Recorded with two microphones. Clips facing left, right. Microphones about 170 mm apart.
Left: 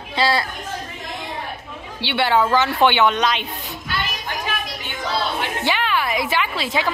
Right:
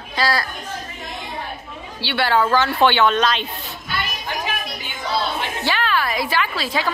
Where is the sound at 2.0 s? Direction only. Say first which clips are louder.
Left 1 dB; 20° left (ahead or behind).